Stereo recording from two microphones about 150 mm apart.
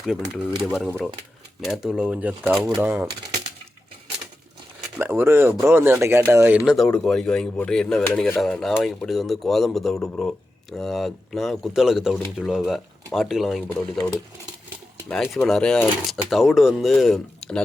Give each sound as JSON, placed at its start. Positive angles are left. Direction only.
{"t": 0.6, "sound": "speech", "side_deg": -5}
{"t": 2.8, "sound": "speech", "side_deg": -15}
{"t": 4.9, "sound": "speech", "side_deg": -15}
{"t": 6.7, "sound": "speech", "side_deg": 5}
{"t": 15.1, "sound": "speech", "side_deg": 10}